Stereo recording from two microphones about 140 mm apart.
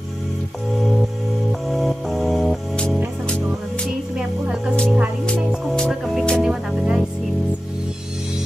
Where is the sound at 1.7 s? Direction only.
Centre (ahead or behind).